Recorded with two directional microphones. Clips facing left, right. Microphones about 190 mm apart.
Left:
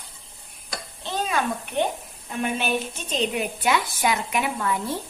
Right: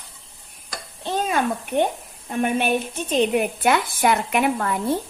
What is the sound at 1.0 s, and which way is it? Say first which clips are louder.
Bathtub: right 4 dB; 50° right (ahead or behind).